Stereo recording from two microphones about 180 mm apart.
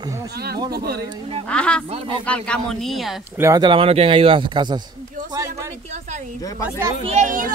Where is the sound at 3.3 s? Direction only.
20° right (ahead or behind).